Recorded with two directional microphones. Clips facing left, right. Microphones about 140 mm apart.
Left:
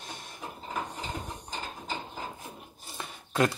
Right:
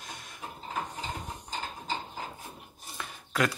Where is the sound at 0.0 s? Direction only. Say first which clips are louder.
Left 2 dB; 30° left (ahead or behind).